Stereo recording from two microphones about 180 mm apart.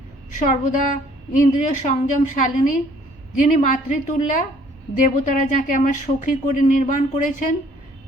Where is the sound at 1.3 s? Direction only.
45° left (ahead or behind).